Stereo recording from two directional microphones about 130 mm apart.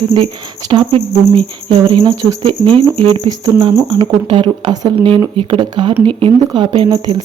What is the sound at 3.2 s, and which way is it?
Speech, 30° right (ahead or behind).